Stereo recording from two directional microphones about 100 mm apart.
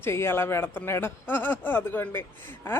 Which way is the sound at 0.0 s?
25° left (ahead or behind).